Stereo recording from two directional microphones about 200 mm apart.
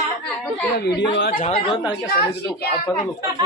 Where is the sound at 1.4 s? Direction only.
30° left (ahead or behind).